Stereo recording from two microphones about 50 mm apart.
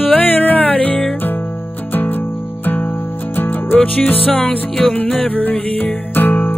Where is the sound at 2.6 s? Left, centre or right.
Left.